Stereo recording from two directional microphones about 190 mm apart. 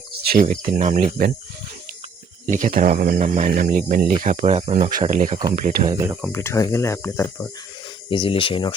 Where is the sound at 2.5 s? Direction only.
45° right (ahead or behind).